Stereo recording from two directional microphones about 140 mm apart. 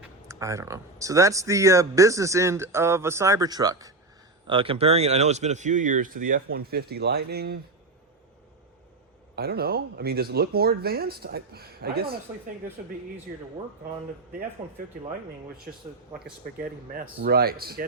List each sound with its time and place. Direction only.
0.3 s speech: 20° right (ahead or behind)
4.4 s speech: 40° right (ahead or behind); by 7.6 s 90° right
9.4 s speech: 90° right
16.6 s speech: 90° right